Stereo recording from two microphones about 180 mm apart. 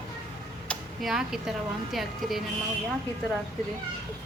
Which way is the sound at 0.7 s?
Centre (ahead or behind).